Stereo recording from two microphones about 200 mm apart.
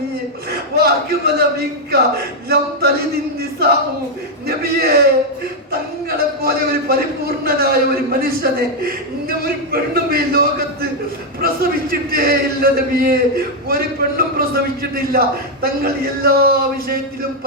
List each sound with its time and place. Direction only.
0.5 s a man's voice: 50° right (ahead or behind)
4.4 s a sound: 50° right (ahead or behind)
6.1 s a man's voice: 50° right (ahead or behind)